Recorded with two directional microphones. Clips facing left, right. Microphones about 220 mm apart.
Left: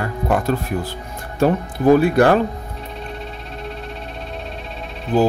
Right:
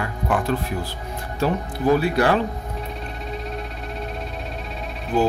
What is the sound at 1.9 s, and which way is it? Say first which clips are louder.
Speech: left 6 dB; 50° left (ahead or behind).